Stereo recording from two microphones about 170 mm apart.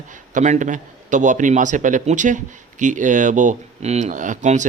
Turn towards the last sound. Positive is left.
turn(degrees=-45)  # may be behind; listen again after turning